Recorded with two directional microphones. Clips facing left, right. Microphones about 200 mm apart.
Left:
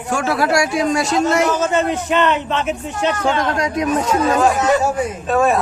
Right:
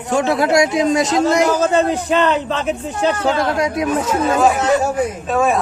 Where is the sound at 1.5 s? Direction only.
35° right (ahead or behind).